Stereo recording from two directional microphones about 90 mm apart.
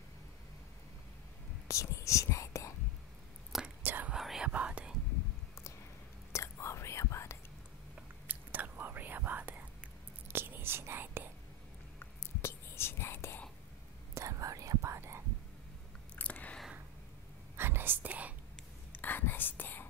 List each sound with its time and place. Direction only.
1.7 s whispering: 35° left (ahead or behind)
3.8 s whispering: 20° right (ahead or behind)
4.1 s whispering: 5° right (ahead or behind)
6.3 s whispering: 30° left (ahead or behind)
8.3 s whispering: 20° right (ahead or behind)
12.0 s whispering: 30° left (ahead or behind)
14.1 s whispering: 35° right (ahead or behind)
16.2 s a sound: 15° left (ahead or behind)
17.6 s whispering: 25° right (ahead or behind)
18.9 s whispering: 20° left (ahead or behind)